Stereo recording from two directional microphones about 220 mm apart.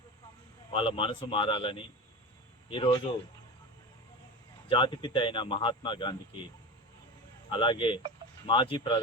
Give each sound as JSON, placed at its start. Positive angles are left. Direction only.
{"t": 0.7, "sound": "speech", "side_deg": 25}
{"t": 4.7, "sound": "speech", "side_deg": 20}
{"t": 7.5, "sound": "speech", "side_deg": 20}